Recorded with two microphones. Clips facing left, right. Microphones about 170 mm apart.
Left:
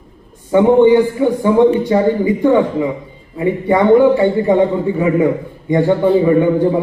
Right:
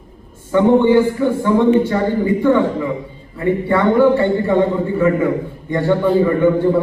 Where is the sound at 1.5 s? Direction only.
15° left (ahead or behind).